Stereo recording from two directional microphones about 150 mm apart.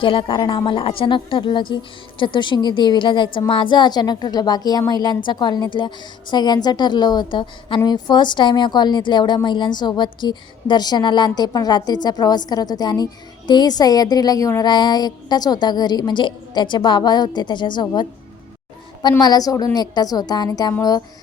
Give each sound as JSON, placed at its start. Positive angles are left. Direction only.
{"t": 0.0, "sound": "a woman's voice", "side_deg": 35}
{"t": 19.2, "sound": "a woman's voice", "side_deg": 25}